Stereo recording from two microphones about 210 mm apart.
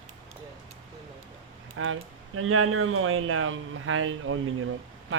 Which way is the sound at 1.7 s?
80° right.